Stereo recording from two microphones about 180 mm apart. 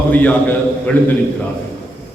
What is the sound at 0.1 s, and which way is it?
Speech, 10° left (ahead or behind).